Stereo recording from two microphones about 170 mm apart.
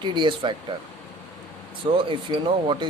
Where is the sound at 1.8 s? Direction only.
30° right (ahead or behind).